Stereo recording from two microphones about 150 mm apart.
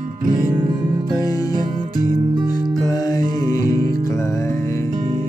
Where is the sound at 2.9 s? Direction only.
25° left (ahead or behind).